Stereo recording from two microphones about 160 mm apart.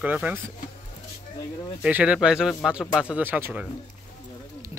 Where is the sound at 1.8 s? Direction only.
5° right (ahead or behind).